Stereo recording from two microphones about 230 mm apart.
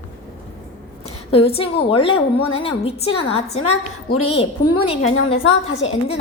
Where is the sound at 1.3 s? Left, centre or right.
Left.